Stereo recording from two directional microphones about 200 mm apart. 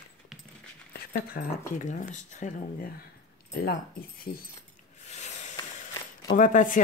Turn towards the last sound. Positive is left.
turn(degrees=40)  # may be behind; listen again after turning